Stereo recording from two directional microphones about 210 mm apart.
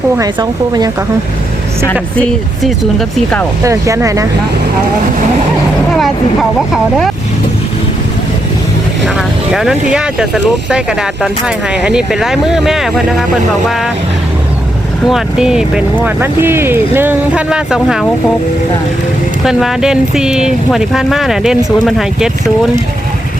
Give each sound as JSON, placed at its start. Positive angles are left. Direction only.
{"t": 0.2, "sound": "speech", "side_deg": -20}
{"t": 2.6, "sound": "speech", "side_deg": 0}
{"t": 3.6, "sound": "speech", "side_deg": -15}
{"t": 9.0, "sound": "speech", "side_deg": 0}
{"t": 15.0, "sound": "speech", "side_deg": 0}
{"t": 19.5, "sound": "speech", "side_deg": 0}